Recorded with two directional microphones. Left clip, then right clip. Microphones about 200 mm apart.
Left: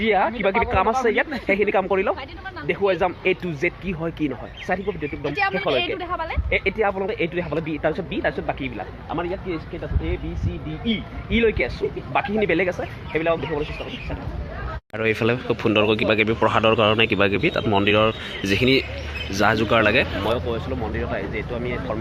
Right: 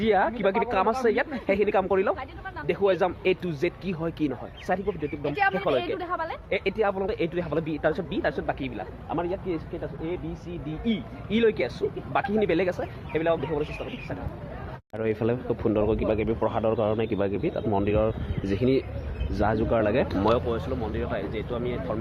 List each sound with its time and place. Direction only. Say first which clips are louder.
0.0 s speech: left 3 dB; 10° right (ahead or behind)
5.3 s speech: left 1 dB; 40° right (ahead or behind)
5.9 s speech: left 3 dB; 10° right (ahead or behind)
6.7 s speech: left 2 dB; centre (ahead or behind)
10.8 s speech: left 5 dB; 5° right (ahead or behind)
14.9 s speech: left 5 dB; centre (ahead or behind)
20.5 s speech: left 2 dB; 20° right (ahead or behind)
20.9 s speech: left 4 dB; 5° right (ahead or behind)